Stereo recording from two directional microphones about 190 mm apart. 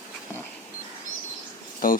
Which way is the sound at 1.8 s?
45° left (ahead or behind).